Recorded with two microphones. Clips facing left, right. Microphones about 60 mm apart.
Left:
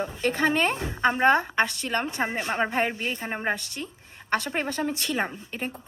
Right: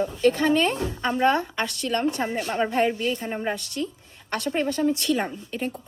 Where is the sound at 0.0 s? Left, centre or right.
Left.